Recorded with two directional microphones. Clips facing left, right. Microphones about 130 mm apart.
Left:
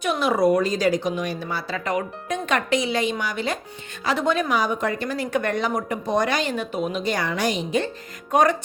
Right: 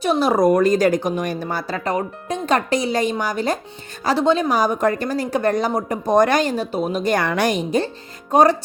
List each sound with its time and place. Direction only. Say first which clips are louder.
0.0 s speech: right 4 dB; 35° right (ahead or behind)
4.5 s speech: right 5 dB; 40° right (ahead or behind); by 7.6 s 60° right (ahead or behind)
8.3 s speech: right 4 dB; 35° right (ahead or behind)